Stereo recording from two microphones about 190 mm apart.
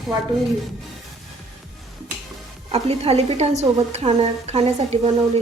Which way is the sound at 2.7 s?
30° right (ahead or behind).